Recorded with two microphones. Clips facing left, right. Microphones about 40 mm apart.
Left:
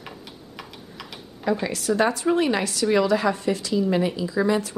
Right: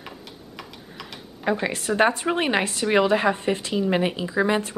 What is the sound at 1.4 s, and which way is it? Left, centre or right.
A woman's voice, right.